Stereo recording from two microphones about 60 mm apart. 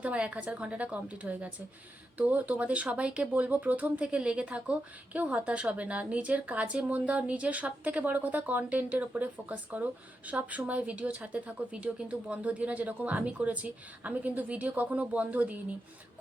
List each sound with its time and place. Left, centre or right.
0.0 s a woman's voice: right